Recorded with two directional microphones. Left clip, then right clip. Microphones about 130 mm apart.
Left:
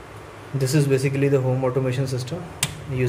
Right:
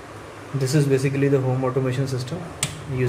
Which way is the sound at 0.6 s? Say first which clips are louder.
Even; 25° left (ahead or behind).